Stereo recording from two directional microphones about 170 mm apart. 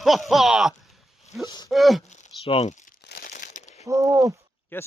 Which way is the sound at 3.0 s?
60° left (ahead or behind).